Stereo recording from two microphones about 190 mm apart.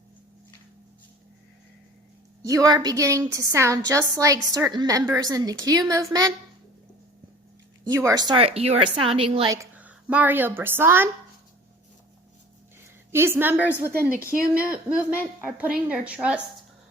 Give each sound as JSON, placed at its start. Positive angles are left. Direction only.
{"t": 2.4, "sound": "a woman's voice", "side_deg": -15}
{"t": 7.9, "sound": "a woman's voice", "side_deg": -20}
{"t": 9.6, "sound": "a woman's voice", "side_deg": -10}
{"t": 13.1, "sound": "a woman's voice", "side_deg": -15}